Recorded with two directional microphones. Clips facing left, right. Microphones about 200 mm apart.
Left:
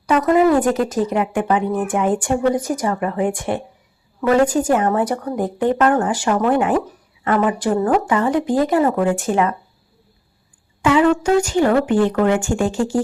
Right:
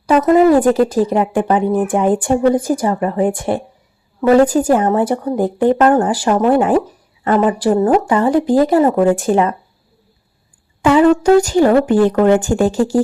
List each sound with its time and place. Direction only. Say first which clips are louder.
0.1 s speech: right 4 dB; 30° right (ahead or behind)
10.8 s speech: right 5 dB; 35° right (ahead or behind)